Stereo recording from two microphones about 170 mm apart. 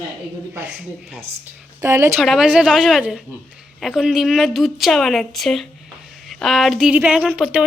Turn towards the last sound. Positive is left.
turn(degrees=-5)  # may be behind; listen again after turning